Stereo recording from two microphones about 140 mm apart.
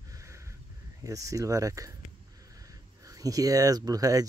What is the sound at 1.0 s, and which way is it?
Speech, 25° right (ahead or behind).